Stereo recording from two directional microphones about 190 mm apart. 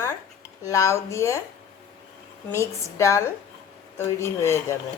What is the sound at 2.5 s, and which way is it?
Speech, 15° left (ahead or behind).